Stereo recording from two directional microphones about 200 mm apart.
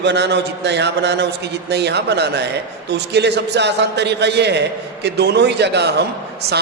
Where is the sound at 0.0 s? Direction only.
60° right (ahead or behind).